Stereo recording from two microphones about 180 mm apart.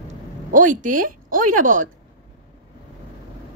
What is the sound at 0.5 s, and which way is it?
A woman's voice, 45° right (ahead or behind).